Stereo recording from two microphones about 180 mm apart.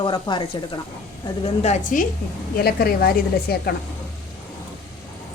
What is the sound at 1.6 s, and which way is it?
Stir, 40° left (ahead or behind).